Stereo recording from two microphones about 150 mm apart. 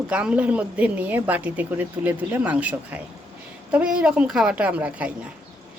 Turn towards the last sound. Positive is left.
turn(degrees=-10)  # may be behind; listen again after turning